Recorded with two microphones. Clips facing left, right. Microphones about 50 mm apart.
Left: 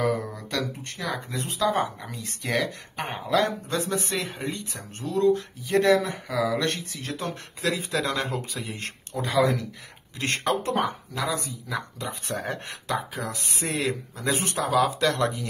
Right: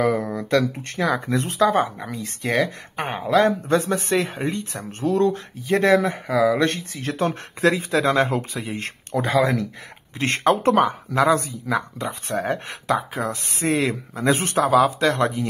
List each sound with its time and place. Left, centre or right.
0.0 s speech: right
1.6 s speech: right
5.0 s speech: right
9.1 s speech: right
10.1 s speech: right
10.6 s speech: right
12.0 s speech: right
14.8 s speech: right